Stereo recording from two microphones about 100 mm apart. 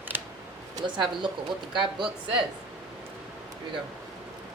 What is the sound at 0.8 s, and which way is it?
A woman's voice, 50° right (ahead or behind).